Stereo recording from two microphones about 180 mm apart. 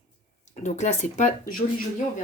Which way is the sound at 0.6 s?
40° left (ahead or behind).